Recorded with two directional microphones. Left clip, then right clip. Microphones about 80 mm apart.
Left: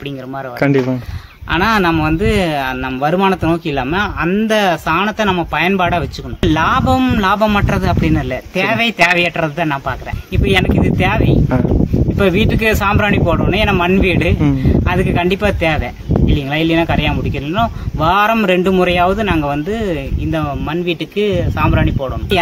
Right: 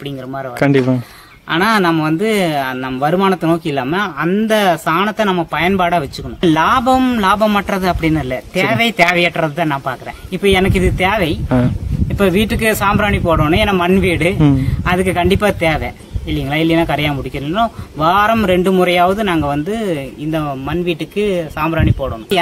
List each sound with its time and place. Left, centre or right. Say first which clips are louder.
1.5 s speech: even; right
6.4 s speech: right 2 dB; right